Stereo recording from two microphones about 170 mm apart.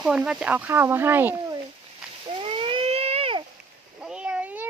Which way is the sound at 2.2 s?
30° right (ahead or behind).